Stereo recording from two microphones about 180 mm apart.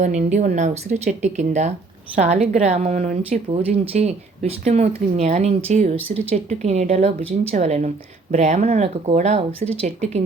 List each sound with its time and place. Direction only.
0.0 s a woman's voice: 40° right (ahead or behind)